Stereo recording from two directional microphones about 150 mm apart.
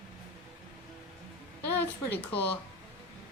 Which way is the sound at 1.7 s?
10° left (ahead or behind).